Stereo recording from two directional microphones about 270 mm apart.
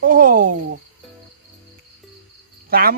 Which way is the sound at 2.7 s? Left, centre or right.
Right.